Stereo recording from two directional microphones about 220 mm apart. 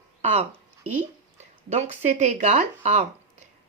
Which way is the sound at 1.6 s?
30° right (ahead or behind).